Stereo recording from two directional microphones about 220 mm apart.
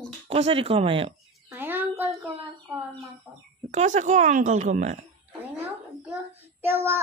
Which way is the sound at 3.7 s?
30° right (ahead or behind).